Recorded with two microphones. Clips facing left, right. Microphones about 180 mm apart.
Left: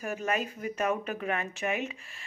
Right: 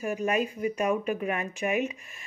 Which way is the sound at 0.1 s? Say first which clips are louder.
Right 4 dB; 15° right (ahead or behind).